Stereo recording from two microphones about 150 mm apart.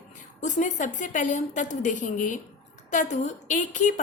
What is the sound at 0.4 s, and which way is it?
A woman's voice, 55° left (ahead or behind).